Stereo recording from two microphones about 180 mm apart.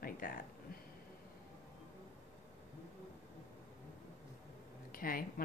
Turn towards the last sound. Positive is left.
turn(degrees=50)  # may be behind; listen again after turning